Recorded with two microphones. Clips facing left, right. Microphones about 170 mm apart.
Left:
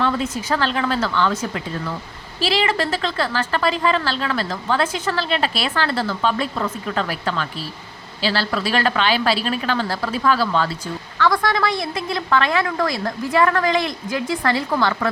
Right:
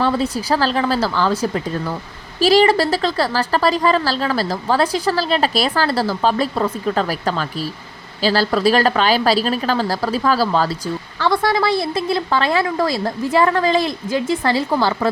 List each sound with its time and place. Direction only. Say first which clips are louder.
0.0 s a woman's voice: right 3 dB; 35° right (ahead or behind)